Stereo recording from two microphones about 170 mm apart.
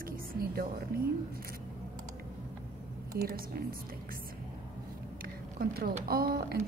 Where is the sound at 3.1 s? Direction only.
60° right (ahead or behind).